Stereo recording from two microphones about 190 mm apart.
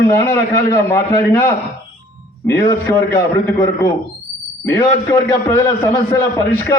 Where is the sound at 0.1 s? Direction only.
15° left (ahead or behind).